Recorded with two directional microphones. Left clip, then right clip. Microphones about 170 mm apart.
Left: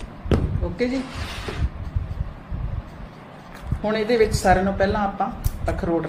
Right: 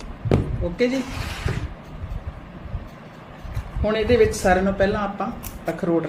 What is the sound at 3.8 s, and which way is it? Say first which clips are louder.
A woman's voice: right 2 dB; 20° right (ahead or behind).